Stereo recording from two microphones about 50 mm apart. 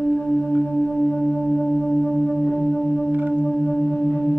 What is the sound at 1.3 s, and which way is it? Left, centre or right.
Singing bowl, centre.